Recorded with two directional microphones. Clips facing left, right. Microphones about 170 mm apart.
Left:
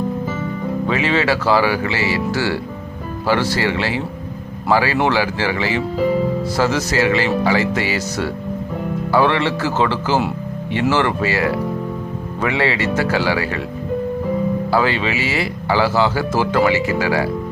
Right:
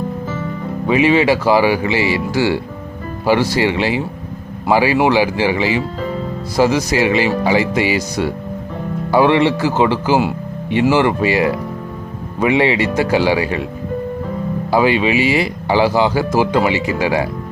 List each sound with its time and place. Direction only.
0.9 s speech: 15° right (ahead or behind)
14.7 s speech: 15° right (ahead or behind)